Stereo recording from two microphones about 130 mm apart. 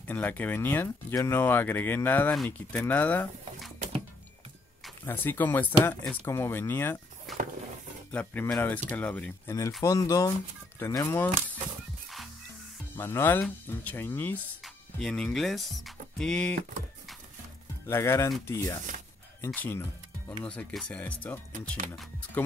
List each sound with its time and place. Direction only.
0.0 s speech: 15° left (ahead or behind)
5.0 s speech: 15° left (ahead or behind)
7.3 s a sound: centre (ahead or behind)
8.1 s speech: 10° left (ahead or behind)
9.8 s speech: 25° left (ahead or behind)
12.9 s speech: 15° left (ahead or behind)
14.6 s speech: centre (ahead or behind)
17.8 s speech: 20° left (ahead or behind)